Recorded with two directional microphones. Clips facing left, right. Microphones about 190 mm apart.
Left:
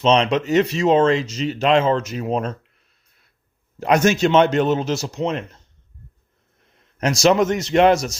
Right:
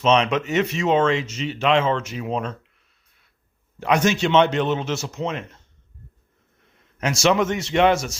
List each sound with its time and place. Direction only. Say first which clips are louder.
0.0 s speech: left 2 dB; 35° left (ahead or behind)
3.8 s speech: left 3 dB; 45° left (ahead or behind)
7.0 s speech: left 3 dB; 40° left (ahead or behind)